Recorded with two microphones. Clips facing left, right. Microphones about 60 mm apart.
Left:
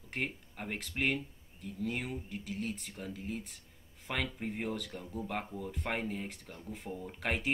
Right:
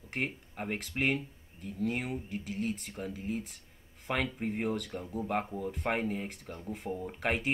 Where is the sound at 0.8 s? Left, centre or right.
Centre.